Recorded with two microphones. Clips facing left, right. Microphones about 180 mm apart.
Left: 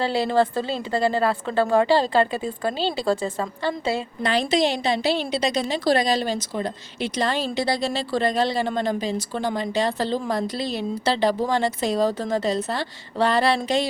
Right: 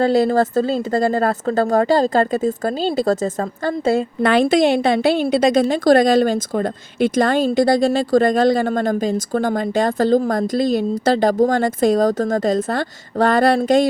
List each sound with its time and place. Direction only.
0.0 s a woman's voice: 45° right (ahead or behind)